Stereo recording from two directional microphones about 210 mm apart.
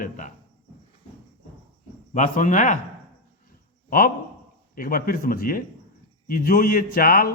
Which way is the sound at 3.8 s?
40° left (ahead or behind).